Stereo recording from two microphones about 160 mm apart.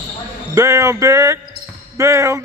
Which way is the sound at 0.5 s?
20° right (ahead or behind).